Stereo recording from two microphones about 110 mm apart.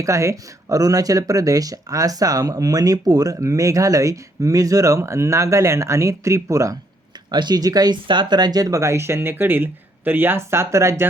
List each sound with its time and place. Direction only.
0.0 s speech: 25° right (ahead or behind)
7.3 s speech: 40° right (ahead or behind); by 11.1 s 25° right (ahead or behind)